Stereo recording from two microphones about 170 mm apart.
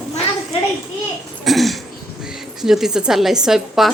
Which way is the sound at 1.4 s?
Centre (ahead or behind).